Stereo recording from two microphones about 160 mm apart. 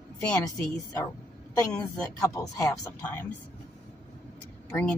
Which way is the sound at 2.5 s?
25° left (ahead or behind).